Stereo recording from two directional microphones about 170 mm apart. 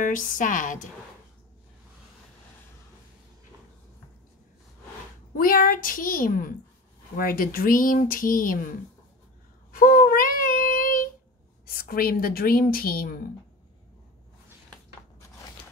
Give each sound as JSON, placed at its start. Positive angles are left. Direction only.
{"t": 0.0, "sound": "a woman's voice", "side_deg": 50}
{"t": 5.3, "sound": "a woman's voice", "side_deg": 55}
{"t": 9.7, "sound": "child singing", "side_deg": 55}
{"t": 11.6, "sound": "a woman's voice", "side_deg": 60}